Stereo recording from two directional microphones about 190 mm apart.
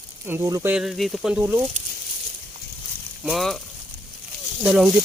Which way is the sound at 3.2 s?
Centre (ahead or behind).